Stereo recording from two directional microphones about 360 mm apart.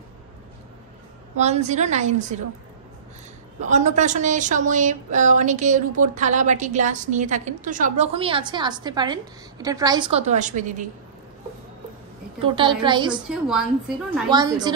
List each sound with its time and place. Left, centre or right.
1.3 s speech: centre
3.6 s speech: centre
12.4 s a woman's voice: centre
13.1 s a woman's voice: centre